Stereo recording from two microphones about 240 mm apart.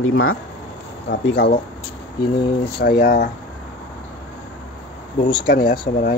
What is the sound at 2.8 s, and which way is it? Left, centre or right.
Speech, left.